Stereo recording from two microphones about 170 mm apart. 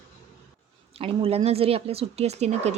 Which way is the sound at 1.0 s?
35° right (ahead or behind).